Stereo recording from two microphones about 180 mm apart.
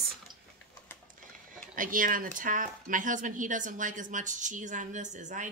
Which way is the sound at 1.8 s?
50° right (ahead or behind).